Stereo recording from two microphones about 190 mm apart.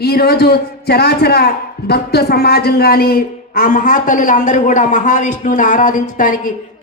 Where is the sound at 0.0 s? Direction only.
55° left (ahead or behind).